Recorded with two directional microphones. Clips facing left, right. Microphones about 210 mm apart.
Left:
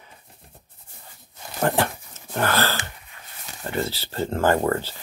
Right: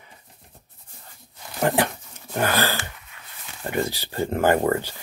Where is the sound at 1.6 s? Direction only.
15° right (ahead or behind).